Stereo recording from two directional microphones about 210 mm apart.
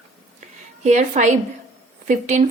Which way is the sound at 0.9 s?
35° right (ahead or behind).